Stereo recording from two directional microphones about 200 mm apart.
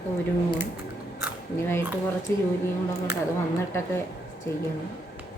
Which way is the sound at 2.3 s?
10° left (ahead or behind).